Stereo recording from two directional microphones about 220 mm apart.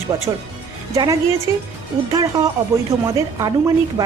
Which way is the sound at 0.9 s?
15° right (ahead or behind).